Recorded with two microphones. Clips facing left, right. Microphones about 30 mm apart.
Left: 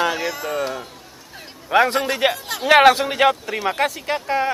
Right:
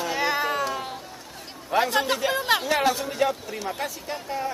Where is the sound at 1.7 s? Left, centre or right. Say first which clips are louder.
Left 5 dB; left.